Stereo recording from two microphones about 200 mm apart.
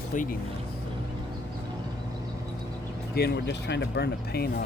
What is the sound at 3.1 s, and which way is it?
Speech, 50° left (ahead or behind).